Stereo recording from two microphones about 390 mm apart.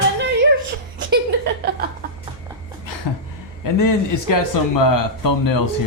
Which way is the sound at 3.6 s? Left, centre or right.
Left.